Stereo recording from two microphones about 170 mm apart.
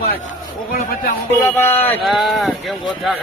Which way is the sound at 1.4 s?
10° left (ahead or behind).